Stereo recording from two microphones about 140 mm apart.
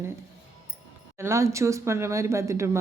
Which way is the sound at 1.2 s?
20° right (ahead or behind).